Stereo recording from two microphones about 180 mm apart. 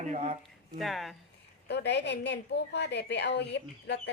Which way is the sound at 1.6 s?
70° left (ahead or behind).